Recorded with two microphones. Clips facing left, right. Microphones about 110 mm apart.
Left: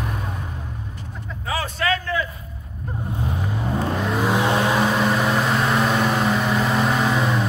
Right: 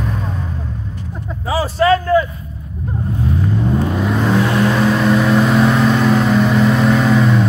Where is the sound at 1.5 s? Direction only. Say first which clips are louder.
Right 10 dB; 30° right (ahead or behind).